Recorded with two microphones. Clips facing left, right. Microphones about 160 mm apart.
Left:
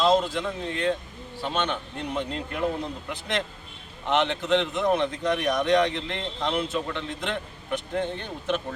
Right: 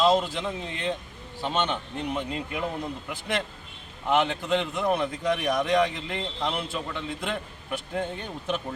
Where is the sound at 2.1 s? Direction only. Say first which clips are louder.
Left 5 dB; 5° right (ahead or behind).